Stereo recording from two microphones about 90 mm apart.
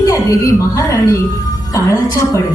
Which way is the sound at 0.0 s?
45° left (ahead or behind).